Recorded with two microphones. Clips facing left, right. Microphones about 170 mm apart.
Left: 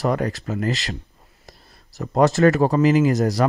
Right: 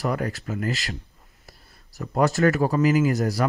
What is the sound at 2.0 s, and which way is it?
Speech, 40° left (ahead or behind).